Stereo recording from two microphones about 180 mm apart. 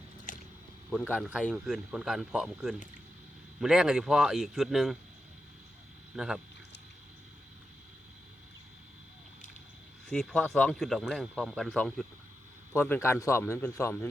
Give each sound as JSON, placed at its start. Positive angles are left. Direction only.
{"t": 0.3, "sound": "a sound", "side_deg": 45}
{"t": 0.9, "sound": "speech", "side_deg": 5}
{"t": 6.1, "sound": "speech", "side_deg": -5}
{"t": 10.1, "sound": "speech", "side_deg": 5}